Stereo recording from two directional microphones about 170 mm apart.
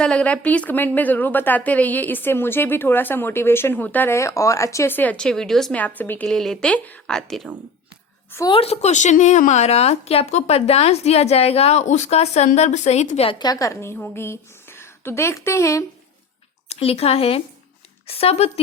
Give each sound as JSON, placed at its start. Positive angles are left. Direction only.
{"t": 0.0, "sound": "speech", "side_deg": 5}
{"t": 8.4, "sound": "a woman's voice", "side_deg": 35}
{"t": 13.4, "sound": "speech", "side_deg": 20}
{"t": 16.6, "sound": "a woman's voice", "side_deg": 35}